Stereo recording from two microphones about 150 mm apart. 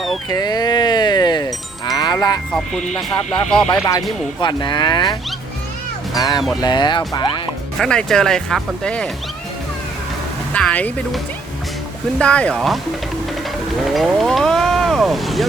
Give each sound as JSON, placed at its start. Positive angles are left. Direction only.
{"t": 0.3, "sound": "livestock", "side_deg": 25}
{"t": 2.5, "sound": "speech", "side_deg": 5}
{"t": 4.4, "sound": "speech", "side_deg": 30}
{"t": 6.1, "sound": "speech", "side_deg": 25}
{"t": 7.8, "sound": "speech", "side_deg": 5}
{"t": 10.5, "sound": "speech", "side_deg": 10}
{"t": 12.2, "sound": "speech", "side_deg": 5}
{"t": 13.9, "sound": "speech", "side_deg": 0}